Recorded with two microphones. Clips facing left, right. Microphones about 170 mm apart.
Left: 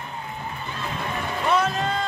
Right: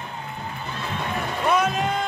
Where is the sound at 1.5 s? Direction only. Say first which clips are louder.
Even; 15° right (ahead or behind).